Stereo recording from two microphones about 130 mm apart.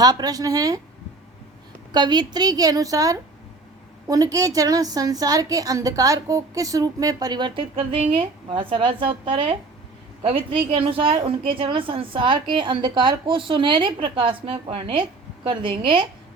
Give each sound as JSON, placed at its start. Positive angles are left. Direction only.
{"t": 0.0, "sound": "a woman's voice", "side_deg": -30}
{"t": 1.9, "sound": "a woman's voice", "side_deg": -35}